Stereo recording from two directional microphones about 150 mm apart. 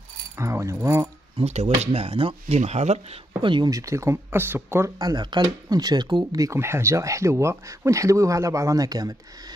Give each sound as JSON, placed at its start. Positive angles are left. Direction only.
{"t": 0.4, "sound": "speech", "side_deg": -20}
{"t": 1.4, "sound": "speech", "side_deg": -45}